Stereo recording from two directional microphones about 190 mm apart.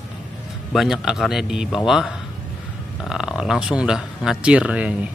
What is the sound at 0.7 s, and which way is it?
Speech, 5° right (ahead or behind).